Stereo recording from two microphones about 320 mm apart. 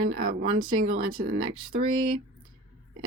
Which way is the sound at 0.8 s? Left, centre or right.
Right.